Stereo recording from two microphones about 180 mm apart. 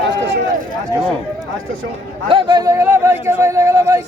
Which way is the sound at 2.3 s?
20° right (ahead or behind).